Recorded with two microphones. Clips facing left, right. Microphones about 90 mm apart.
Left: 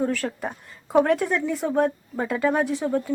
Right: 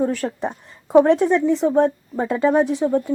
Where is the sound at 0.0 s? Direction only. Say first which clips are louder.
Right 4 dB; 20° right (ahead or behind).